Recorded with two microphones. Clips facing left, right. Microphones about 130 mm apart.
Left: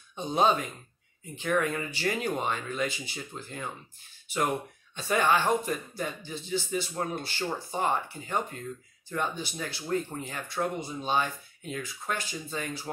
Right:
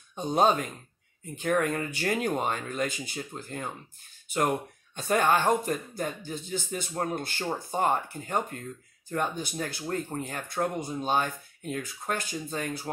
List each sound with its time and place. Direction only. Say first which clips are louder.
0.1 s speech: right 1 dB; 45° right (ahead or behind)